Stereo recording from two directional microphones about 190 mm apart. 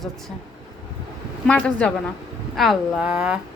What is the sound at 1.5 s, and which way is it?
A woman's voice, 5° left (ahead or behind).